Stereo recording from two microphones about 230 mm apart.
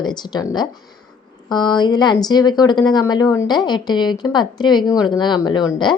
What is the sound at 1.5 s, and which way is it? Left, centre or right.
Speech, centre.